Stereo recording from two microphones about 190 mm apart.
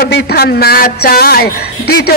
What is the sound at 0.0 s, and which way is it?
Speech, 55° left (ahead or behind).